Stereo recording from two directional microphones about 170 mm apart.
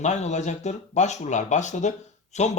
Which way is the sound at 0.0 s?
45° left (ahead or behind).